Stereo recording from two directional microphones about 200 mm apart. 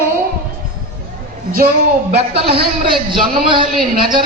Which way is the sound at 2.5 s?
50° right (ahead or behind).